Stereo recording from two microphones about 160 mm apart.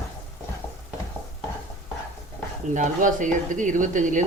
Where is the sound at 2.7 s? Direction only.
50° right (ahead or behind).